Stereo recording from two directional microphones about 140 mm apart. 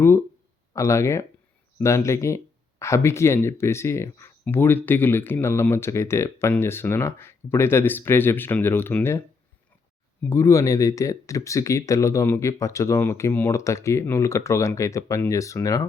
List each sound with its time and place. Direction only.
0.0 s speech: 20° left (ahead or behind)
10.2 s speech: 20° left (ahead or behind)